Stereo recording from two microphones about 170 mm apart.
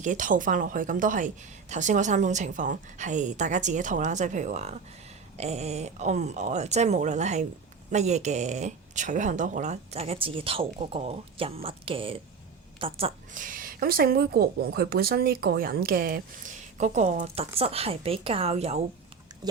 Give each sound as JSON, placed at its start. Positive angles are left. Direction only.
{"t": 0.0, "sound": "a woman's voice", "side_deg": -50}
{"t": 13.3, "sound": "speech", "side_deg": -50}